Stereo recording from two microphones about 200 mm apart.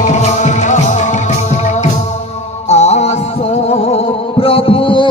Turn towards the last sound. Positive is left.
turn(degrees=25)  # may be behind; listen again after turning